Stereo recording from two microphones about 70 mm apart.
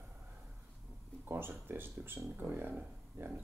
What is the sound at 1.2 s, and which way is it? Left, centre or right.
Speech, right.